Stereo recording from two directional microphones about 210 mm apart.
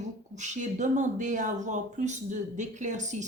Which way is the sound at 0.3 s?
35° right (ahead or behind).